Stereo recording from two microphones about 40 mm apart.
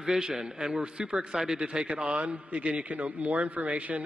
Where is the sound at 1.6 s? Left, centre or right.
Right.